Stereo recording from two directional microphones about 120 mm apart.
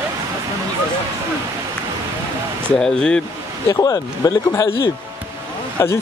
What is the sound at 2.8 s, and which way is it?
Speech, 5° left (ahead or behind).